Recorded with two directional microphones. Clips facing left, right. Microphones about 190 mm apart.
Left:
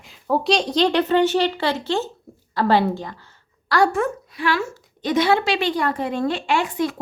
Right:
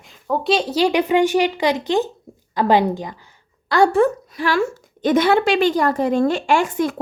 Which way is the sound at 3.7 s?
30° right (ahead or behind).